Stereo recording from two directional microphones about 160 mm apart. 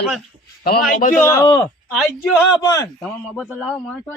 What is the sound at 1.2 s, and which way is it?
Speech, 20° left (ahead or behind).